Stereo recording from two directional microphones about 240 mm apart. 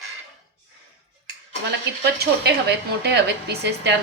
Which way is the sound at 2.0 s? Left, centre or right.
Right.